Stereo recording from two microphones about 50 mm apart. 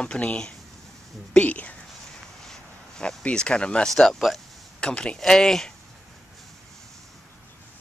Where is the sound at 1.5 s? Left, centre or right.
Left.